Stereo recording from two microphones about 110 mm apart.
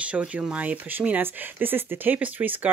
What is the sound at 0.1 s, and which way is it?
Speech, 10° right (ahead or behind).